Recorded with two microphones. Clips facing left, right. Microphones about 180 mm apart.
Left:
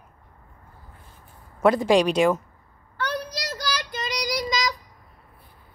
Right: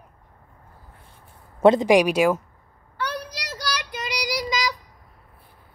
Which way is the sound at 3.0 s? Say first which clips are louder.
Left 2 dB; 10° right (ahead or behind).